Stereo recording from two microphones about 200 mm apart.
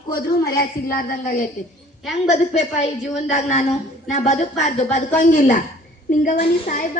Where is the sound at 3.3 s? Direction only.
35° left (ahead or behind).